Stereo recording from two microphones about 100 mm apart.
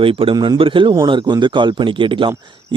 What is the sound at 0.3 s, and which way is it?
Speech, 45° right (ahead or behind).